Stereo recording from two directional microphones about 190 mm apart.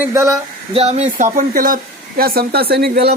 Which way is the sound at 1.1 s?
45° right (ahead or behind).